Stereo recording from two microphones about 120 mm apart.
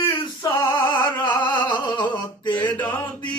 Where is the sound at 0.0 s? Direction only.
30° left (ahead or behind).